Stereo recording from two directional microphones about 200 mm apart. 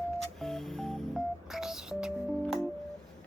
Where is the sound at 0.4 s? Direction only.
Centre (ahead or behind).